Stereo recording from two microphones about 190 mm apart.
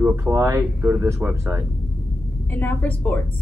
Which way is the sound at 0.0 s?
15° right (ahead or behind).